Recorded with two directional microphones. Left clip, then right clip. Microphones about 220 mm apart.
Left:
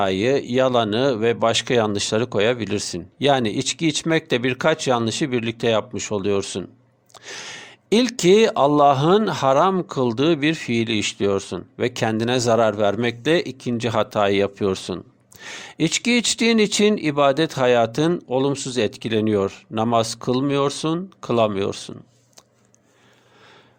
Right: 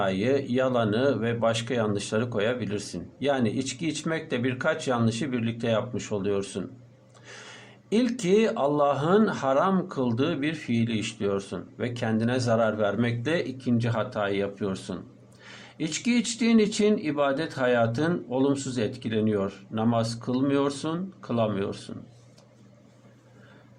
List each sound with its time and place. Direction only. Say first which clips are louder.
0.0 s speech: left 6 dB; 45° left (ahead or behind)